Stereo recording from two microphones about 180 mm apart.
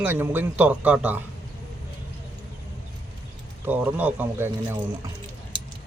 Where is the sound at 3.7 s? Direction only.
10° right (ahead or behind).